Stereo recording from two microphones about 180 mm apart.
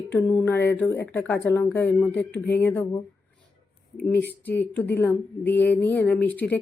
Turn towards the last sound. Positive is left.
turn(degrees=10)  # may be behind; listen again after turning